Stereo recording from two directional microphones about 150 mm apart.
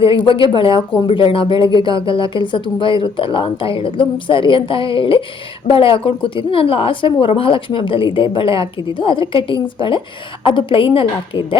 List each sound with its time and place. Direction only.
0.0 s a woman's voice: 35° left (ahead or behind)